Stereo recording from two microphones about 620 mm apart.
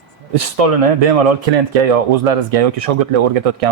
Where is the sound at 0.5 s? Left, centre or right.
Right.